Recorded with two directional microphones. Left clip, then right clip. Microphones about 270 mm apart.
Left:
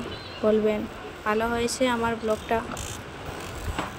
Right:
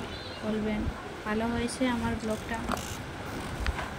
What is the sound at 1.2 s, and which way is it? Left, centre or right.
Speech, centre.